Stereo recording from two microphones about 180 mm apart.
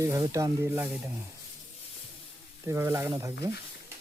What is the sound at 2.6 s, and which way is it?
Stir, 15° right (ahead or behind).